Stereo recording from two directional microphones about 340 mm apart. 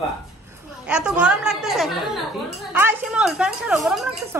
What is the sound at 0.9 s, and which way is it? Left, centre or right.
A woman's voice, centre.